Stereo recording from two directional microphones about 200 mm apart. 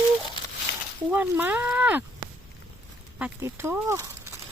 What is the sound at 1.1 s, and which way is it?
Speech, 10° right (ahead or behind).